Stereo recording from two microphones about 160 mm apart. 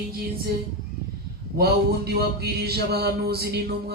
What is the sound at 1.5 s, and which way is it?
Mantra, 80° right.